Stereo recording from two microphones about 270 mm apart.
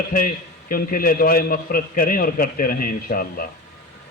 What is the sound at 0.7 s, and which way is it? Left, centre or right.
A man's voice, left.